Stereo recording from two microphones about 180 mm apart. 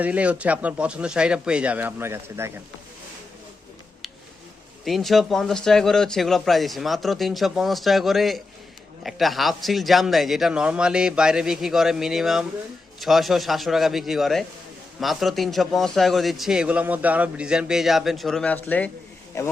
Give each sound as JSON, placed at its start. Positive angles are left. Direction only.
{"t": 0.0, "sound": "speech", "side_deg": -10}
{"t": 4.9, "sound": "a man's voice", "side_deg": 0}